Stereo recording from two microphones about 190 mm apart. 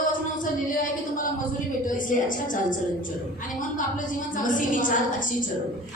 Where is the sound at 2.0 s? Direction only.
45° left (ahead or behind).